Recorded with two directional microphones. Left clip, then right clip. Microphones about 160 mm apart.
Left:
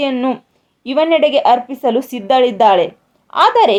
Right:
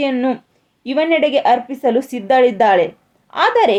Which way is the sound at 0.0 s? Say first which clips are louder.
Left 1 dB; 25° left (ahead or behind).